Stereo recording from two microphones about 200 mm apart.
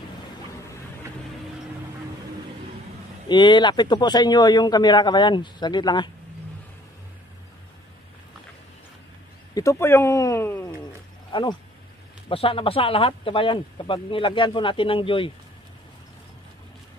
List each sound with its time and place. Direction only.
3.3 s speech: 25° left (ahead or behind)
9.5 s speech: 15° left (ahead or behind)
12.3 s speech: 25° left (ahead or behind)